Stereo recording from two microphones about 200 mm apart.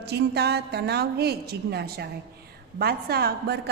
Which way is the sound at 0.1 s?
55° right (ahead or behind).